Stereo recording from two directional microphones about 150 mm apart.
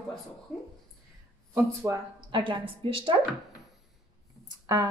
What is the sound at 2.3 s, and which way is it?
Speech, 35° right (ahead or behind).